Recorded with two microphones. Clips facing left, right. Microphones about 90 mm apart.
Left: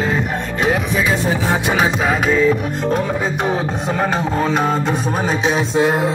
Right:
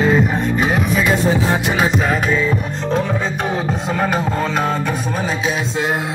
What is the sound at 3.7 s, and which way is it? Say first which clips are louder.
Speech: even; 30° left (ahead or behind).